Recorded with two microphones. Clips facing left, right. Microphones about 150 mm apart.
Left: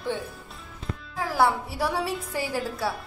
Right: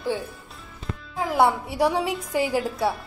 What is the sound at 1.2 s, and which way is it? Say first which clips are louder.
Speech: right 3 dB; 20° right (ahead or behind).